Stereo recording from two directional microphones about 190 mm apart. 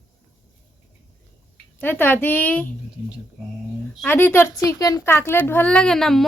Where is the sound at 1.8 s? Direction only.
10° left (ahead or behind).